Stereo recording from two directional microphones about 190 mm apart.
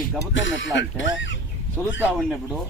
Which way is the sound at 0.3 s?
80° left.